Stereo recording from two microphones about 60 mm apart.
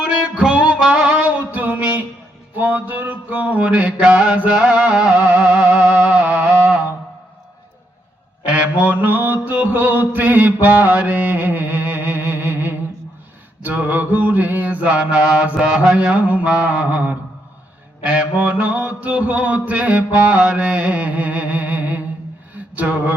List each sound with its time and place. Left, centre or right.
0.0 s music: centre
1.5 s music: right
2.6 s mantra: right
8.4 s mantra: right